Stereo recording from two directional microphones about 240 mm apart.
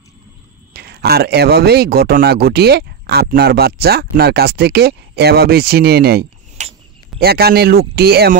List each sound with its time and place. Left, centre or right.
0.7 s a man's voice: right